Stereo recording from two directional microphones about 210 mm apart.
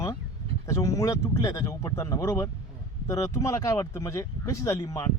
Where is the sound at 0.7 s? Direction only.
15° left (ahead or behind).